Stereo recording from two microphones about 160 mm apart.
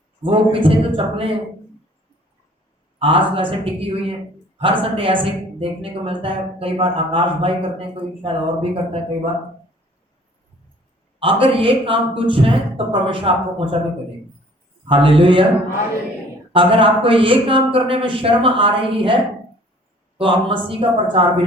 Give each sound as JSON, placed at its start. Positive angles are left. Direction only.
{"t": 0.2, "sound": "a woman's voice", "side_deg": -35}
{"t": 3.0, "sound": "a woman's voice", "side_deg": -35}
{"t": 11.2, "sound": "a woman's voice", "side_deg": -35}
{"t": 14.8, "sound": "a woman's voice", "side_deg": -35}
{"t": 16.5, "sound": "a woman's voice", "side_deg": -35}